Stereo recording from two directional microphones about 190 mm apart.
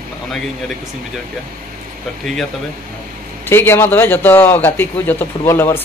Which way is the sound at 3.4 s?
10° left (ahead or behind).